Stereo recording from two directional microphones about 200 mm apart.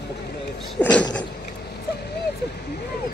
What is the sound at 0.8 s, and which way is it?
Vehicle, 5° left (ahead or behind).